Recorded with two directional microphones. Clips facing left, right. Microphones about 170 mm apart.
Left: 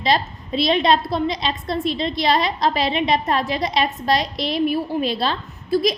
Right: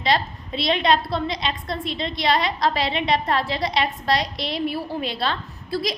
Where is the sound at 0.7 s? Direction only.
25° left (ahead or behind).